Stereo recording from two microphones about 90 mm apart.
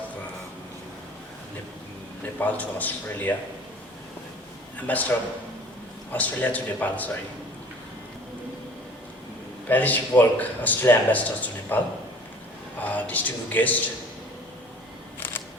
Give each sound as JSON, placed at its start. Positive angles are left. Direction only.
{"t": 2.4, "sound": "a man's voice", "side_deg": 20}
{"t": 4.9, "sound": "a man's voice", "side_deg": 15}
{"t": 6.1, "sound": "a man's voice", "side_deg": 15}
{"t": 9.6, "sound": "speech", "side_deg": 20}
{"t": 12.8, "sound": "speech", "side_deg": 20}